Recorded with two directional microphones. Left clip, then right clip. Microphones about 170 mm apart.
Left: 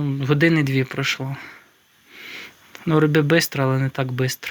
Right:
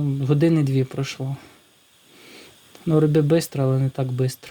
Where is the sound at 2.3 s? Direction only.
Centre (ahead or behind).